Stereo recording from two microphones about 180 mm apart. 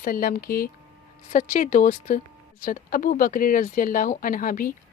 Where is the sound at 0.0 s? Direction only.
50° left (ahead or behind).